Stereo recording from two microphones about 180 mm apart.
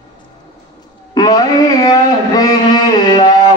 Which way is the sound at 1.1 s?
20° left (ahead or behind).